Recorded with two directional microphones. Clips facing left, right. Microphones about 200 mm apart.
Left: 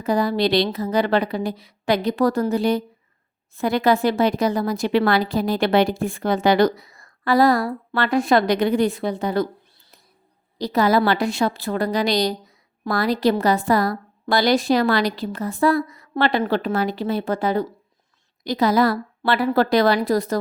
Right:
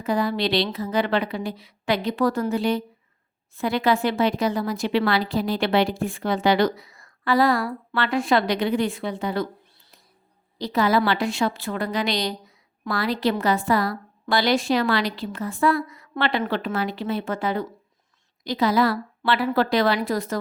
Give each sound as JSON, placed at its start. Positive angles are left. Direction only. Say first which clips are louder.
{"t": 0.0, "sound": "a woman's voice", "louder": "left 3 dB", "side_deg": 40}
{"t": 10.6, "sound": "a woman's voice", "louder": "left 3 dB", "side_deg": 40}